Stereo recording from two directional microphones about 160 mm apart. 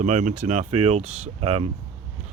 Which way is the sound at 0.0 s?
50° right (ahead or behind).